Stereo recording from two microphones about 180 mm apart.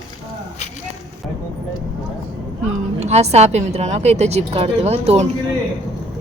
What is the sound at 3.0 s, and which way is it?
Speech, 35° right (ahead or behind).